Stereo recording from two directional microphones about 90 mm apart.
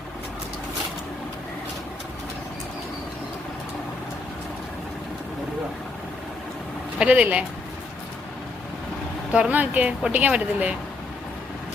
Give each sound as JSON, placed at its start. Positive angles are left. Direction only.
{"t": 7.0, "sound": "a woman's voice", "side_deg": -15}
{"t": 9.3, "sound": "a woman's voice", "side_deg": -15}